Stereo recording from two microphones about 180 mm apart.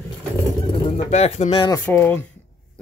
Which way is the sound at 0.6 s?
35° left (ahead or behind).